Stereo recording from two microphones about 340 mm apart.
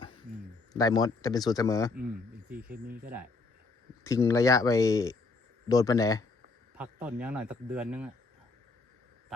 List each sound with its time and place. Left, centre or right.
0.7 s speech: centre
2.6 s speech: right
4.0 s speech: centre
6.7 s speech: centre